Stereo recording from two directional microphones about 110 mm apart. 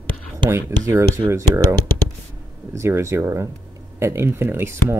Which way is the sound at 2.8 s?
25° right (ahead or behind).